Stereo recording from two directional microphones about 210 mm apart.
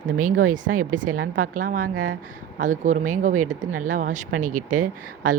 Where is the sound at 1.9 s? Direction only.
85° right.